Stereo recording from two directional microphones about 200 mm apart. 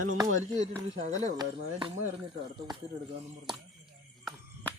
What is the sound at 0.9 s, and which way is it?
Speech, 35° right (ahead or behind).